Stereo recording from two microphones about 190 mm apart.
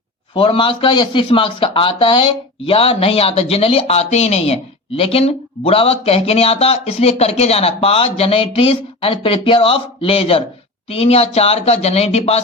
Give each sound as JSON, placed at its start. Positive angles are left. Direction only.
{"t": 0.3, "sound": "speech", "side_deg": 25}